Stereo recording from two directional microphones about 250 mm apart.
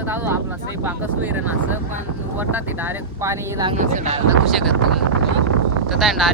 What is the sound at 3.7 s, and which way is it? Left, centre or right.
Speech, right.